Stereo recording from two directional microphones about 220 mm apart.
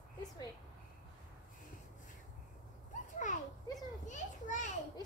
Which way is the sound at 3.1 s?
35° left (ahead or behind).